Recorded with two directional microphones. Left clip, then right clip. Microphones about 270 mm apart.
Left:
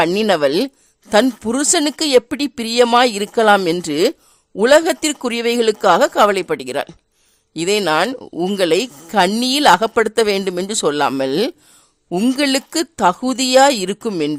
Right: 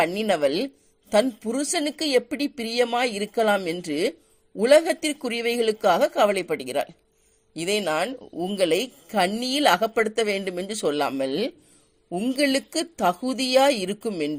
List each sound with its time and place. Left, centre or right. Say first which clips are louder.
0.0 s speech: left 7 dB; left